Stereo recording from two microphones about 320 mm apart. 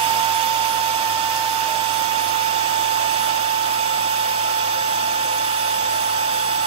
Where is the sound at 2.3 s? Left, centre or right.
Centre.